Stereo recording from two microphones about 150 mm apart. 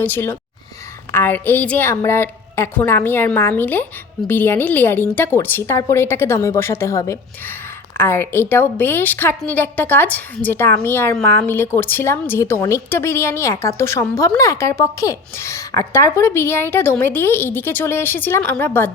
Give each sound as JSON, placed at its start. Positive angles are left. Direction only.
{"t": 0.0, "sound": "a woman's voice", "side_deg": 15}